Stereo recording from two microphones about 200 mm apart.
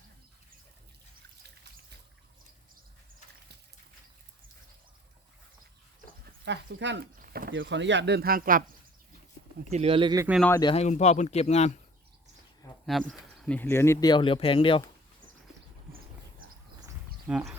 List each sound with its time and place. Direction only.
6.4 s speech: 60° right (ahead or behind)
7.2 s a sound: 50° right (ahead or behind)
7.5 s speech: 65° right (ahead or behind); by 8.6 s 45° right (ahead or behind)
9.6 s speech: 30° right (ahead or behind)
10.6 s speech: 25° left (ahead or behind)
10.8 s speech: 35° left (ahead or behind)
12.8 s speech: centre (ahead or behind); by 14.8 s 25° left (ahead or behind)
17.2 s speech: 5° right (ahead or behind)